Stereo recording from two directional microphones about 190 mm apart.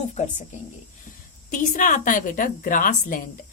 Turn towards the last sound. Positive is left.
turn(degrees=45)  # may be behind; listen again after turning